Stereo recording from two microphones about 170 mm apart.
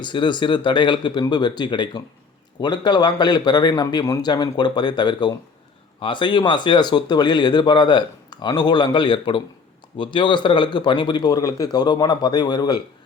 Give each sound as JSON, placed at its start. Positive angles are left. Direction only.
{"t": 0.0, "sound": "speech", "side_deg": 25}